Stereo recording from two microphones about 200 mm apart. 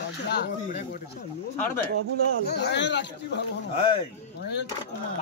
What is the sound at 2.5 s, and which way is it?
Speech, 55° left (ahead or behind).